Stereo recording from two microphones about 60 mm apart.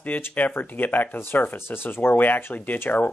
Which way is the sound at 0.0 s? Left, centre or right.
Left.